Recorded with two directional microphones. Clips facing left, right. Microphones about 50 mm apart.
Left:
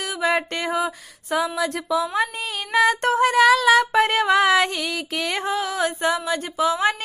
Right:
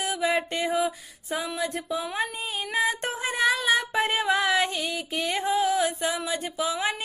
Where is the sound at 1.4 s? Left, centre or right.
Left.